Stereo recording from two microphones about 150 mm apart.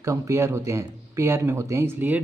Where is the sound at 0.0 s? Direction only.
20° right (ahead or behind).